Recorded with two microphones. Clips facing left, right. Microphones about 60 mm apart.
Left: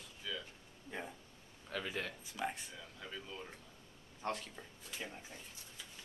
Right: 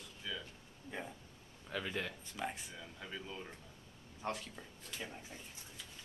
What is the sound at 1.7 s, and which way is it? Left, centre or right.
Speech, centre.